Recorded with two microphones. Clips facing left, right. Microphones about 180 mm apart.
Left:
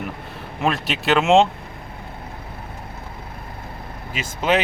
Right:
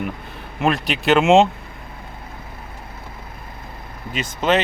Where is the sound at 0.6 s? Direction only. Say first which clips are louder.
Right 3 dB; centre (ahead or behind).